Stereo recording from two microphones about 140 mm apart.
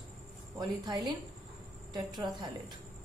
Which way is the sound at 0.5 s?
30° right (ahead or behind).